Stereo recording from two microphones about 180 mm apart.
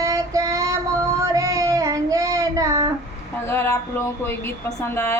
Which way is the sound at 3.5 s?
15° left (ahead or behind).